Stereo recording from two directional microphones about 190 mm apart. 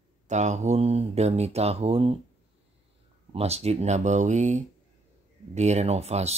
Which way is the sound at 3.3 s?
35° right (ahead or behind).